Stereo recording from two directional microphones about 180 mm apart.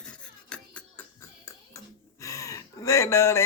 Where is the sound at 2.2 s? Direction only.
20° left (ahead or behind).